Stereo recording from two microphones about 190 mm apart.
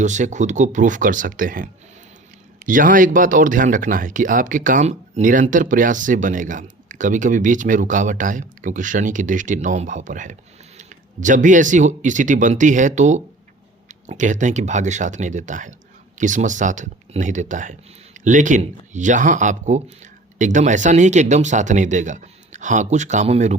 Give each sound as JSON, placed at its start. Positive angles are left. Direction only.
{"t": 0.0, "sound": "speech", "side_deg": -40}